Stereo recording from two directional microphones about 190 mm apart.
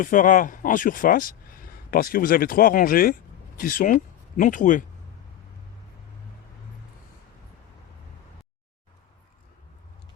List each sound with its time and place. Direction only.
0.0 s speech: 45° left (ahead or behind)